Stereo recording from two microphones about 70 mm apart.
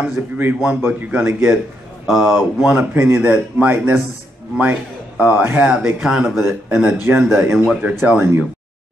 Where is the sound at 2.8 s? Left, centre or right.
Right.